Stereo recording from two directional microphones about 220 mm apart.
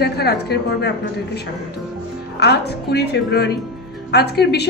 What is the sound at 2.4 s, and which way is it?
A woman's voice, 50° left (ahead or behind).